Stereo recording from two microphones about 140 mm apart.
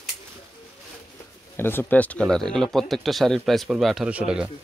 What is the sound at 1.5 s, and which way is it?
Speech, 15° left (ahead or behind).